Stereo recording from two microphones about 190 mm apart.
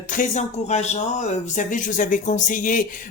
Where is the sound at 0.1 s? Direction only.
40° left (ahead or behind).